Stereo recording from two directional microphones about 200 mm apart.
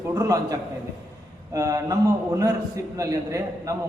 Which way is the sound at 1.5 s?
15° right (ahead or behind).